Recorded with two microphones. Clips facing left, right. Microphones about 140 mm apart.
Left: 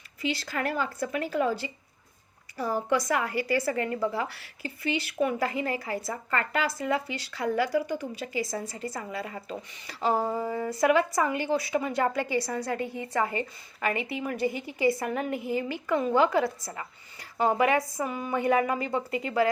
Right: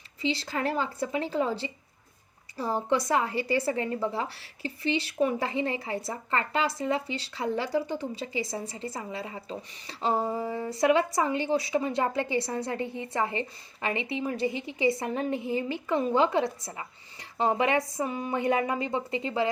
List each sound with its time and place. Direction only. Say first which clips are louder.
0.2 s a woman's voice: right 1 dB; 30° right (ahead or behind)